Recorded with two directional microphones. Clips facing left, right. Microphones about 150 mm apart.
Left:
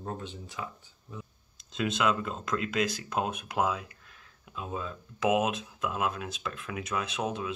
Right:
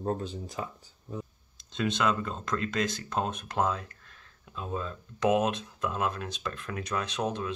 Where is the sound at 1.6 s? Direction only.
5° left (ahead or behind).